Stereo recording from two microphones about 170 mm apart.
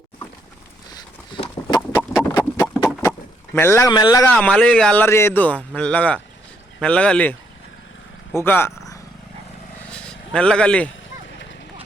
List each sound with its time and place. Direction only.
1.3 s a sound: 30° left (ahead or behind)
3.1 s speech: 15° left (ahead or behind)
4.4 s speech: 5° left (ahead or behind)
8.4 s speech: 15° left (ahead or behind)
9.9 s vehicle: 5° left (ahead or behind)